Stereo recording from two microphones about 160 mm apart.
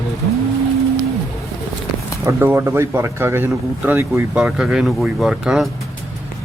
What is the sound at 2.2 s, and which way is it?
Speech, 15° right (ahead or behind).